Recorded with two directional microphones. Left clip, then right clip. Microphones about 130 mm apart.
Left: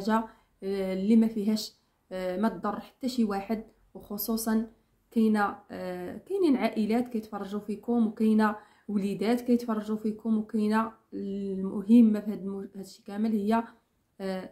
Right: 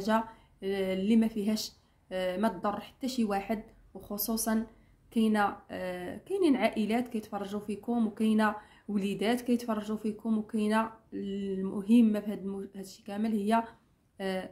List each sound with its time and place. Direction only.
0.0 s speech: 15° right (ahead or behind)